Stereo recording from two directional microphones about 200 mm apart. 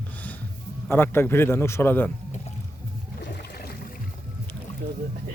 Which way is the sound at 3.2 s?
55° left (ahead or behind).